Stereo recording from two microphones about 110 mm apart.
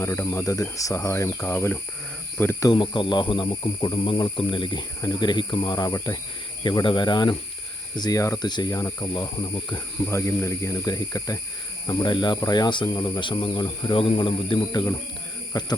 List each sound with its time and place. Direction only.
0.0 s speech: 25° left (ahead or behind)
2.7 s speech: 50° left (ahead or behind); by 9.0 s 30° left (ahead or behind)
9.1 s speech: 40° left (ahead or behind)
10.1 s speech: 25° left (ahead or behind); by 14.6 s 55° left (ahead or behind)
14.7 s speech: 35° left (ahead or behind)